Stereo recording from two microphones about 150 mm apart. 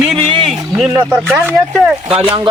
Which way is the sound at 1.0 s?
5° right (ahead or behind).